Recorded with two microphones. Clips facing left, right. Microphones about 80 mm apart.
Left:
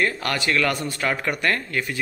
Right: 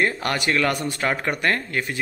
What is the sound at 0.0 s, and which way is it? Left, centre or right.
A man's voice, right.